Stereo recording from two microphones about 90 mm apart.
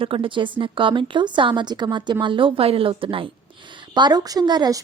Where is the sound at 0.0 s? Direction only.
80° right; by 2.1 s 60° right (ahead or behind).